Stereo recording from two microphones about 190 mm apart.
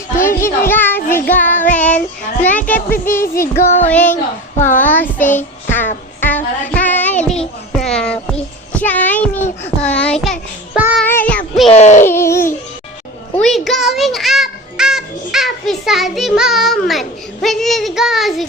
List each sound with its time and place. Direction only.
0.3 s child singing: 15° left (ahead or behind)
6.1 s music: 10° left (ahead or behind)
9.8 s a child's voice: 5° left (ahead or behind)
10.8 s child singing: 10° right (ahead or behind)
11.0 s child singing: 10° left (ahead or behind)
11.7 s speech: 35° left (ahead or behind)
12.0 s babbling: 15° left (ahead or behind)
13.3 s music: centre (ahead or behind)
16.1 s a child's voice: centre (ahead or behind)